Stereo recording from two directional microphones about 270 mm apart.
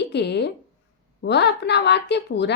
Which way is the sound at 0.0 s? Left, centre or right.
Left.